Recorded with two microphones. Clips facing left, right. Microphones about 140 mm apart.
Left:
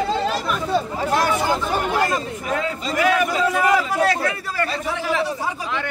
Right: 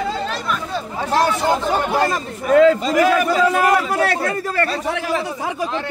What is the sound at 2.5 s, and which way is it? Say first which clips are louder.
Speech: right 14 dB; 85° right.